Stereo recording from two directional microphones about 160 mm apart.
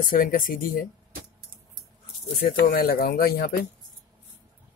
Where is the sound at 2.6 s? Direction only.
65° left (ahead or behind).